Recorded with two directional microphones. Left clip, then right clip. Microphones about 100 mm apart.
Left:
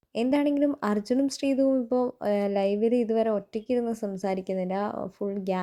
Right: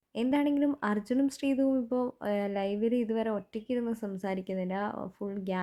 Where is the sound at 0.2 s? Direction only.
25° left (ahead or behind).